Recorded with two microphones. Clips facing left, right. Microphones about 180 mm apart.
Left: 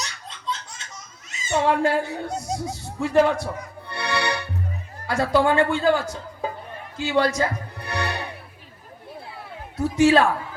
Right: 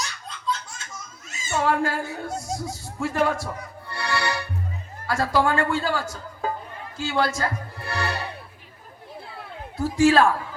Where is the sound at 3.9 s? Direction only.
20° left (ahead or behind).